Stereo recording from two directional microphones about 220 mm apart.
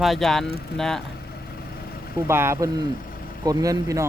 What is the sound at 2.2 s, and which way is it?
Speech, 10° right (ahead or behind).